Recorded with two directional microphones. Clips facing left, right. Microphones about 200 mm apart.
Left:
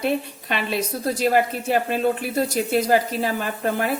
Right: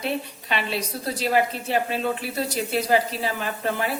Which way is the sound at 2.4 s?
50° left (ahead or behind).